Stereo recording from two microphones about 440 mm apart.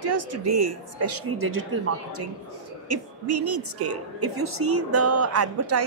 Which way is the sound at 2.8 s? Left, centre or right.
Right.